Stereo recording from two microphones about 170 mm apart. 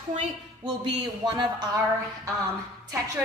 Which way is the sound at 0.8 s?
25° right (ahead or behind).